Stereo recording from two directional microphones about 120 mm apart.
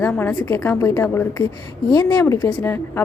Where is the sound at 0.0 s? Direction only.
15° left (ahead or behind).